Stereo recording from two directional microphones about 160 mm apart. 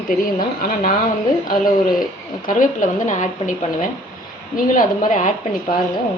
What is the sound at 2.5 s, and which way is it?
A woman's voice, 55° left (ahead or behind).